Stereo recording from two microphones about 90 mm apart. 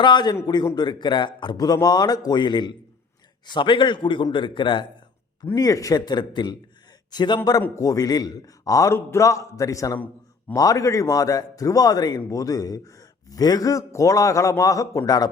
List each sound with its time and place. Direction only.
0.0 s a man's voice: 55° left (ahead or behind)
5.5 s speech: 40° left (ahead or behind)
7.8 s a man's voice: 40° left (ahead or behind)